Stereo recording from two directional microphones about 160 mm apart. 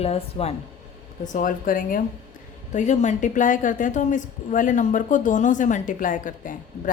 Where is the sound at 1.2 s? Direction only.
55° left (ahead or behind).